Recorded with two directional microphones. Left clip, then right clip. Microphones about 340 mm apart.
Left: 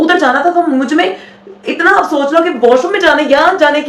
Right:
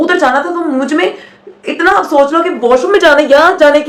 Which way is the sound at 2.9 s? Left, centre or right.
Centre.